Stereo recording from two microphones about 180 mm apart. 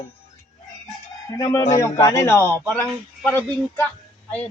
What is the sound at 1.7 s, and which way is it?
A man's voice, 20° left (ahead or behind).